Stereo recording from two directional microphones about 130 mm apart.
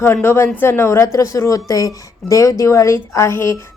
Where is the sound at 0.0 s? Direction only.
20° left (ahead or behind).